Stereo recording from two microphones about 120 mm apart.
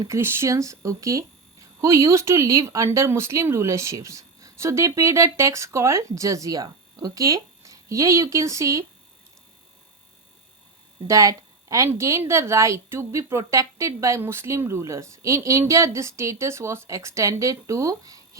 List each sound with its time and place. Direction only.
0.0 s a woman's voice: 20° right (ahead or behind)
11.0 s a woman's voice: 25° right (ahead or behind)